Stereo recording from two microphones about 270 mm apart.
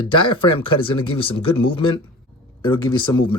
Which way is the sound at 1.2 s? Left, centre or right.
Centre.